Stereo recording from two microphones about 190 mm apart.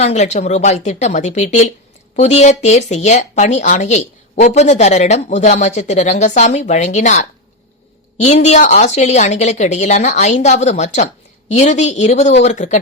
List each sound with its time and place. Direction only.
0.0 s speech: 35° left (ahead or behind)